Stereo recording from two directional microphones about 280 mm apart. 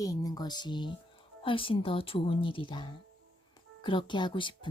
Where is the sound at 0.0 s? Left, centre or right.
Centre.